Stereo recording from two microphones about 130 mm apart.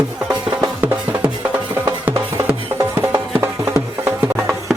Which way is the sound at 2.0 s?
15° right (ahead or behind).